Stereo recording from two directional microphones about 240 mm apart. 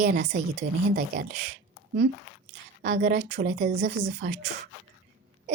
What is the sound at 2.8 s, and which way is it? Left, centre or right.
A woman's voice, right.